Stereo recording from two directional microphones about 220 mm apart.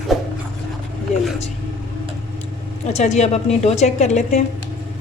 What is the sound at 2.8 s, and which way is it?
A woman's voice, 30° left (ahead or behind).